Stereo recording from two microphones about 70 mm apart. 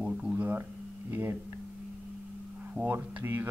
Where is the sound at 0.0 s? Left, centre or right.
Centre.